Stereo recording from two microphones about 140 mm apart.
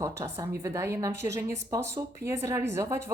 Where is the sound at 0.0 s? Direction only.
20° right (ahead or behind).